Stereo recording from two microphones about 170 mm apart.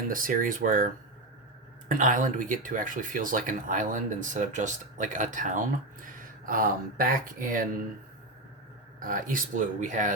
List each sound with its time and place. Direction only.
0.1 s speech: 55° right (ahead or behind)
1.9 s speech: 50° right (ahead or behind)
9.0 s speech: 50° right (ahead or behind)